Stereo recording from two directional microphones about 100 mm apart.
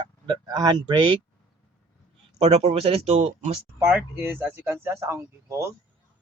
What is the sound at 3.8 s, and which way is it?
Speech, 10° right (ahead or behind).